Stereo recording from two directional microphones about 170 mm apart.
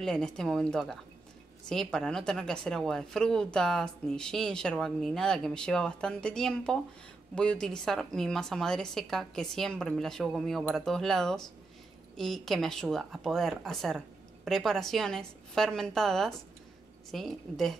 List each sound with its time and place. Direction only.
0.0 s a woman's voice: 5° left (ahead or behind)